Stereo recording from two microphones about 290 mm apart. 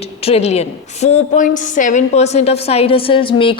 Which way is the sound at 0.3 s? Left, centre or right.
Left.